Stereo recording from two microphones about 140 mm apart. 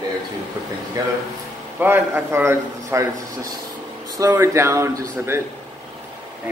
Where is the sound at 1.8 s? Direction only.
15° right (ahead or behind).